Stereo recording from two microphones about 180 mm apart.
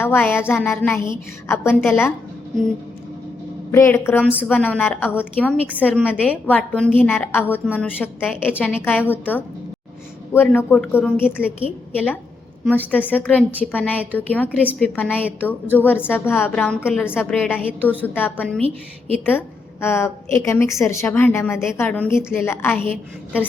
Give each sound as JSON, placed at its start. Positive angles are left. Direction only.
{"t": 0.0, "sound": "a woman's voice", "side_deg": 10}
{"t": 3.7, "sound": "a woman's voice", "side_deg": 15}
{"t": 12.9, "sound": "a woman's voice", "side_deg": 10}
{"t": 17.7, "sound": "a woman's voice", "side_deg": -10}
{"t": 18.0, "sound": "a woman's voice", "side_deg": 10}
{"t": 18.6, "sound": "a woman's voice", "side_deg": -35}
{"t": 19.2, "sound": "a woman's voice", "side_deg": 10}